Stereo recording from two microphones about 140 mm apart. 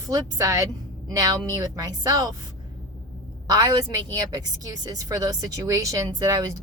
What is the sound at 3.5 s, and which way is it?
Speech, 30° right (ahead or behind).